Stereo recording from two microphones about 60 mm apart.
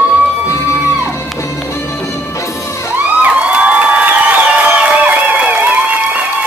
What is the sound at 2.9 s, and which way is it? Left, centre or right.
Crowd, right.